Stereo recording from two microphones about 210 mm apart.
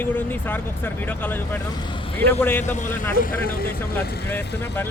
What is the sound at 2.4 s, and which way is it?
Speech, 10° left (ahead or behind).